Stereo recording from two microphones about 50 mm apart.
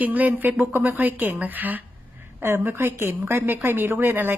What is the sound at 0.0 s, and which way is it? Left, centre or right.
Speech, right.